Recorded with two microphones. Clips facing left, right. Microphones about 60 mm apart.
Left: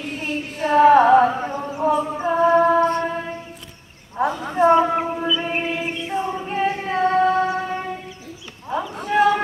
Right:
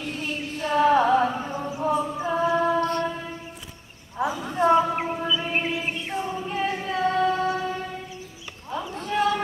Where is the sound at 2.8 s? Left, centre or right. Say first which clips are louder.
Left 5 dB; left.